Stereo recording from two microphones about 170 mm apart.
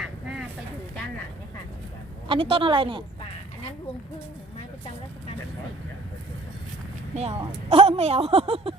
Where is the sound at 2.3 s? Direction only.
30° right (ahead or behind).